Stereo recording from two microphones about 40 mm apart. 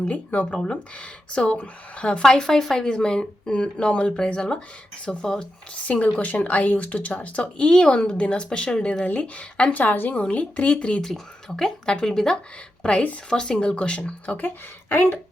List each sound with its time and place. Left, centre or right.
0.1 s a woman's voice: left
0.5 s speech: left
2.2 s speech: centre
6.1 s a woman's voice: left
9.7 s a woman's voice: left
10.1 s a woman's voice: left
11.0 s speech: centre; by 14.0 s left
14.4 s speech: left